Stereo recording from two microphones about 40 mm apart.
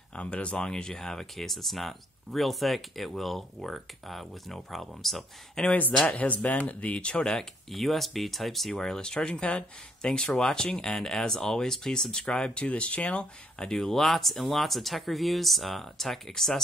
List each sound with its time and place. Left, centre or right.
0.1 s speech: left; by 5.2 s centre
5.7 s speech: left
7.7 s speech: centre
8.7 s speech: centre
13.7 s speech: centre